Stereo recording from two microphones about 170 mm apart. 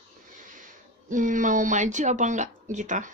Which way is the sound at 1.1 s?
50° right (ahead or behind).